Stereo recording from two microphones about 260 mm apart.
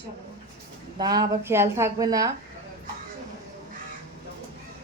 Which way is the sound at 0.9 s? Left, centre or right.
Centre.